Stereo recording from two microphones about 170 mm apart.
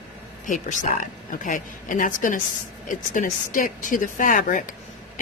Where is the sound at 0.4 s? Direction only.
50° left (ahead or behind).